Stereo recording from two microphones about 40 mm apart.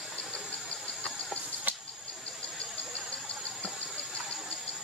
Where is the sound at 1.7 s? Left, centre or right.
Right.